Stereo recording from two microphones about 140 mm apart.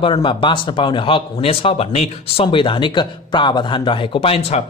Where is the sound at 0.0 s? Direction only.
35° left (ahead or behind).